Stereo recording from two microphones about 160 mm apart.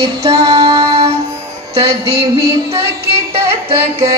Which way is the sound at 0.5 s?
35° right (ahead or behind).